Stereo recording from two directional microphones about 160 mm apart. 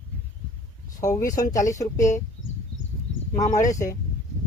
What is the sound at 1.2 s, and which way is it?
Speech, 20° left (ahead or behind).